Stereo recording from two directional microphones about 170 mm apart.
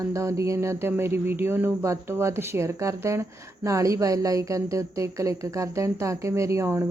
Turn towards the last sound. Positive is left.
turn(degrees=-15)  # may be behind; listen again after turning